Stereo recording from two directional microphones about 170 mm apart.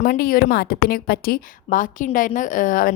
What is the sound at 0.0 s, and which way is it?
A woman's voice, 55° left (ahead or behind).